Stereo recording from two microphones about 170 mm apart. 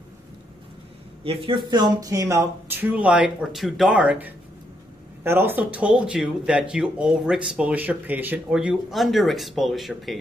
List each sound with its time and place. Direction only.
1.2 s speech: 30° right (ahead or behind); by 10.1 s centre (ahead or behind)